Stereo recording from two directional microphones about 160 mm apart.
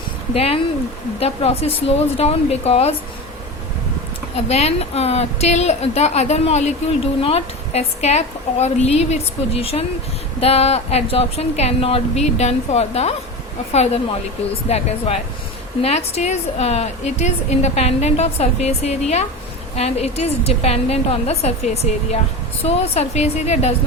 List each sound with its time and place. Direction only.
0.3 s a woman's voice: 35° left (ahead or behind)
4.4 s a woman's voice: 40° left (ahead or behind)